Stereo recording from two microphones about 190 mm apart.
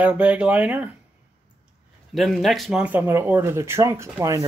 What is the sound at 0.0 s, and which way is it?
Speech, 10° right (ahead or behind).